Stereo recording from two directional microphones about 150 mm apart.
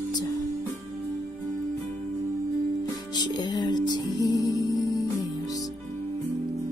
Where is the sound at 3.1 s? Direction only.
30° left (ahead or behind).